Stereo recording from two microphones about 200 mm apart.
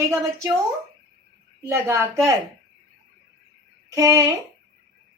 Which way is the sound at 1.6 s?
15° right (ahead or behind).